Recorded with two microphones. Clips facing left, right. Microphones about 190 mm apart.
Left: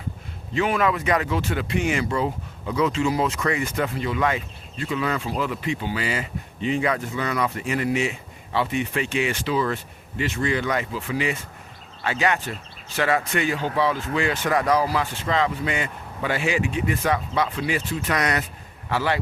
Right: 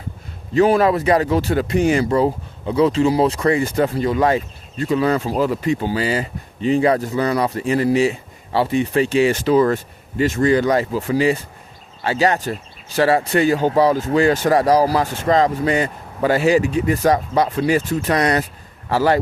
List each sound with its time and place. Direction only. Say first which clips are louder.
0.5 s speech: right 8 dB; 35° right (ahead or behind)